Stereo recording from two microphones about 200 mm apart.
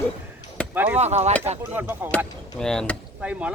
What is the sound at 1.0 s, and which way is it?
Speech, 35° right (ahead or behind).